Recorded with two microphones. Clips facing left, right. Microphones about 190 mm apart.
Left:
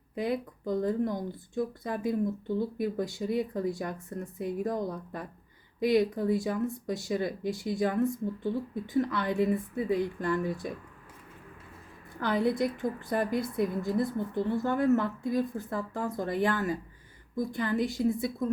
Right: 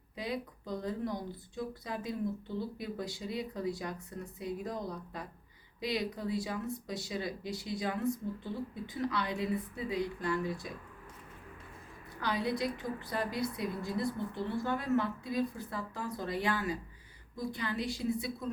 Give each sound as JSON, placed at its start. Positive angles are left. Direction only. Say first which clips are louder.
{"t": 0.2, "sound": "a woman's voice", "louder": "left 7 dB", "side_deg": 50}
{"t": 12.2, "sound": "a woman's voice", "louder": "left 6 dB", "side_deg": 50}